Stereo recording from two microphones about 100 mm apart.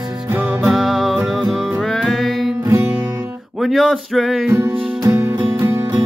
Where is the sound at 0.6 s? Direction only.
5° right (ahead or behind).